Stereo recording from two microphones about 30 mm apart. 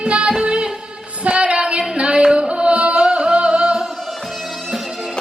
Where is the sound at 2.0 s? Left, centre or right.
Right.